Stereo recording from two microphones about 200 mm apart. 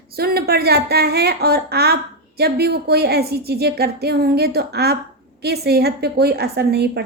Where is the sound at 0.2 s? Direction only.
50° right (ahead or behind).